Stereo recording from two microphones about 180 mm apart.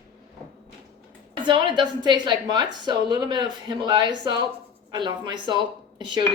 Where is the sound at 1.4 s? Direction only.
25° right (ahead or behind).